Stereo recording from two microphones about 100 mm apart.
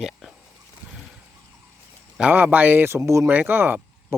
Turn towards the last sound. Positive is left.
turn(degrees=-20)  # may be behind; listen again after turning